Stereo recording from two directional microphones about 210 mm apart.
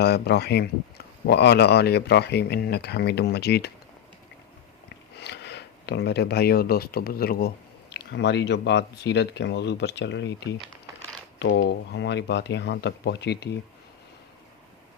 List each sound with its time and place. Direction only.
0.0 s speech: 50° left (ahead or behind)
4.9 s speech: 50° left (ahead or behind)